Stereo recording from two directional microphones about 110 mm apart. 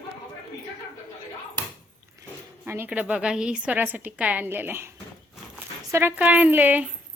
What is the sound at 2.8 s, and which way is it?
A woman's voice, 10° right (ahead or behind).